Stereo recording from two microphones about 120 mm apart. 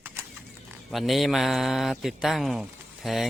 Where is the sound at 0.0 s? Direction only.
15° right (ahead or behind).